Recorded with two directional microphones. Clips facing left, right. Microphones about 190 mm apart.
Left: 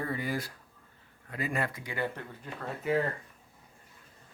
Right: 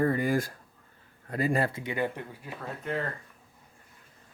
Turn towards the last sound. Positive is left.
turn(degrees=5)  # may be behind; listen again after turning